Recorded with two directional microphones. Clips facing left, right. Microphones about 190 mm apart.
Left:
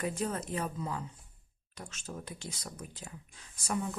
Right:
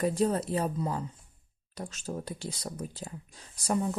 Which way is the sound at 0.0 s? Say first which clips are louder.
Right 7 dB; 35° right (ahead or behind).